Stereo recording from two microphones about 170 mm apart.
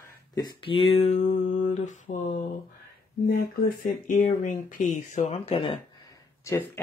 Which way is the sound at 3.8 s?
55° left (ahead or behind).